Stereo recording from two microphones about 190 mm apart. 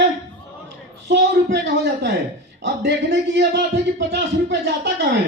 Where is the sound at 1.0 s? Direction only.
65° right (ahead or behind).